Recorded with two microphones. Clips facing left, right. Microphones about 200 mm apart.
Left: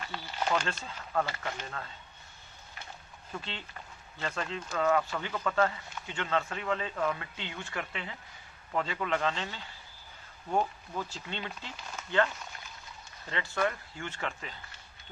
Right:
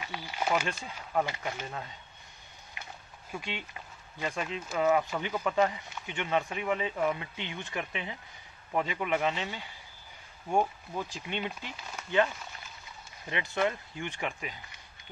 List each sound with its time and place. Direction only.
0.0 s speech: 10° right (ahead or behind)
3.3 s speech: 15° right (ahead or behind)